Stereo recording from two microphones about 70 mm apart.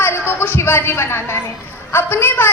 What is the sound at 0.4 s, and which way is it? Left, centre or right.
A woman's voice, left.